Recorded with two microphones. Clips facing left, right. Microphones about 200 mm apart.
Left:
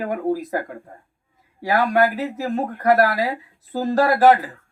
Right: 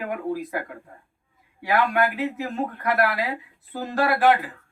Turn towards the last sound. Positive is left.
turn(degrees=40)  # may be behind; listen again after turning